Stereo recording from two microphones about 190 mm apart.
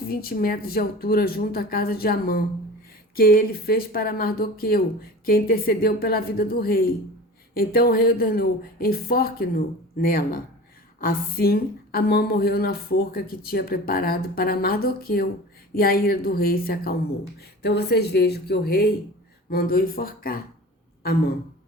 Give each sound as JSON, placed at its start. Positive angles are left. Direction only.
{"t": 0.1, "sound": "speech", "side_deg": 50}